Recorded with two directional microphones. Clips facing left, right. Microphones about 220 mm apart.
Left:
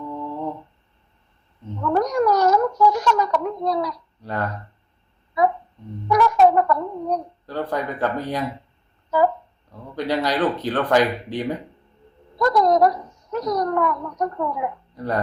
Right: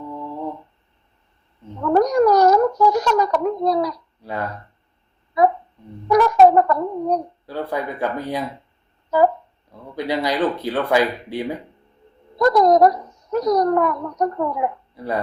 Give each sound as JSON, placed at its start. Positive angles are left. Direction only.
{"t": 1.8, "sound": "a sound", "side_deg": -35}
{"t": 4.2, "sound": "speech", "side_deg": -10}
{"t": 6.1, "sound": "a woman's voice", "side_deg": -40}
{"t": 7.4, "sound": "speech", "side_deg": -10}
{"t": 9.0, "sound": "speech", "side_deg": -40}
{"t": 9.9, "sound": "speech", "side_deg": -10}
{"t": 12.4, "sound": "a woman's voice", "side_deg": -40}
{"t": 14.9, "sound": "speech", "side_deg": -10}